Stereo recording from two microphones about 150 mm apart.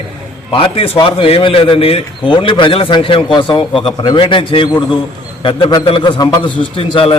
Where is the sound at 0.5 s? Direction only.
35° left (ahead or behind).